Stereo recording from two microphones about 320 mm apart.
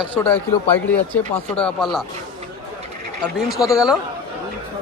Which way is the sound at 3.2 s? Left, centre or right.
Centre.